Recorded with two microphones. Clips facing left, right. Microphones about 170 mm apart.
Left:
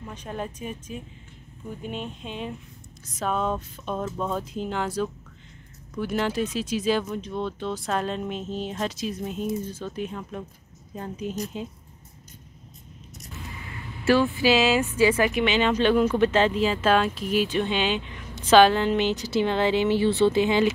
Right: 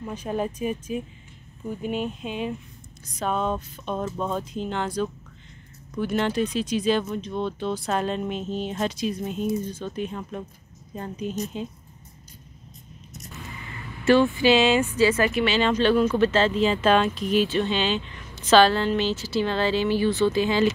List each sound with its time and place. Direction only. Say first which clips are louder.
0.0 s speech: right 6 dB; 10° right (ahead or behind)
14.0 s speech: right 2 dB; 5° left (ahead or behind)
15.0 s speech: even; 15° left (ahead or behind)